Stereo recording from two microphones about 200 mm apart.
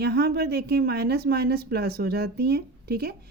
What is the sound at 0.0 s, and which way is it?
A woman's voice, 55° right (ahead or behind).